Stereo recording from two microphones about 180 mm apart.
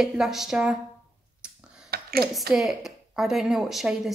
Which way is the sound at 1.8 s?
60° right (ahead or behind).